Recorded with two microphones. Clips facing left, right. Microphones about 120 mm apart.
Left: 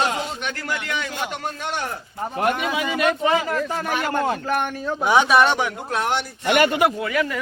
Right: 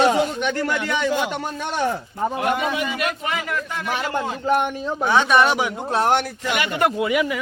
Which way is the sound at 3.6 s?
40° left (ahead or behind).